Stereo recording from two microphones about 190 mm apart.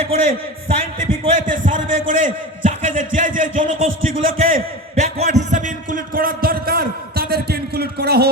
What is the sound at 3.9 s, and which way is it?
Speech, 90° right.